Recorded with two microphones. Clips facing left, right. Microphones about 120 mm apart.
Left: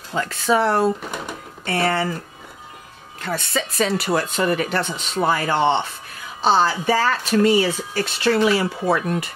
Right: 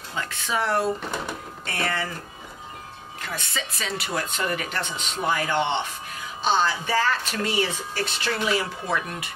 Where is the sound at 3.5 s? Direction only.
40° left (ahead or behind).